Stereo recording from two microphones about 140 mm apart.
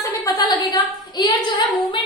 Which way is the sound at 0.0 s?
30° left (ahead or behind).